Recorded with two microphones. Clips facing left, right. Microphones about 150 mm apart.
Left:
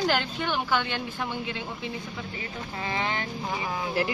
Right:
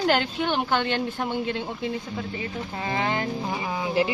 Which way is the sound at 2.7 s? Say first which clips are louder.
Right 3 dB; 35° right (ahead or behind).